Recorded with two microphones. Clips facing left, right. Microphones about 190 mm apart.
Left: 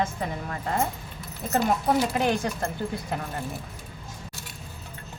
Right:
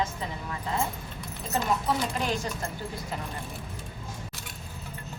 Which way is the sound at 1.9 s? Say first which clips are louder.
Left 5 dB; 55° left (ahead or behind).